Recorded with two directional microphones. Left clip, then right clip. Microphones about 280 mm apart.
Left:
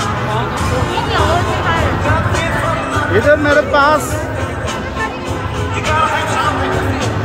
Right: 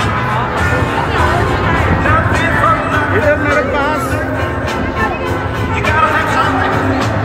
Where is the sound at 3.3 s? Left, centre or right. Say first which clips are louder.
Left 2 dB; centre.